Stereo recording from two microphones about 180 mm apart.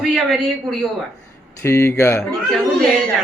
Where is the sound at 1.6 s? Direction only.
15° left (ahead or behind).